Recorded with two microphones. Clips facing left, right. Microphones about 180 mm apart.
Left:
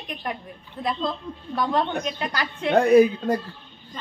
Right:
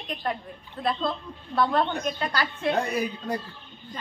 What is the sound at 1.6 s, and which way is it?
A woman's voice, 15° left (ahead or behind).